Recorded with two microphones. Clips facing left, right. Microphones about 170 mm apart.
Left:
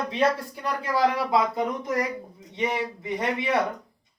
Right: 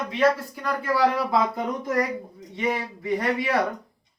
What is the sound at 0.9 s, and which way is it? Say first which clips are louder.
Speech: right 1 dB; 20° left (ahead or behind).